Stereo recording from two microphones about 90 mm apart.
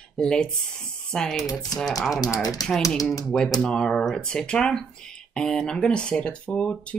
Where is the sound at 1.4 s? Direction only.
45° left (ahead or behind).